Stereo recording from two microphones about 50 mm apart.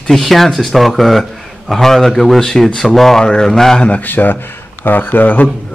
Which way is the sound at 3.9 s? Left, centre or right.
Left.